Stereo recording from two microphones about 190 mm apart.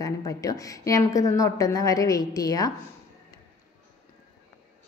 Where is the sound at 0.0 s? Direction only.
20° left (ahead or behind).